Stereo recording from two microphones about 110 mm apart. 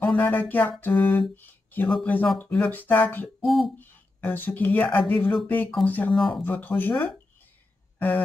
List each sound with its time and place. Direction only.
0.0 s speech: 15° left (ahead or behind)
3.4 s speech: centre (ahead or behind)
3.7 s speech: 15° left (ahead or behind)
6.1 s speech: centre (ahead or behind)
6.4 s speech: 15° left (ahead or behind)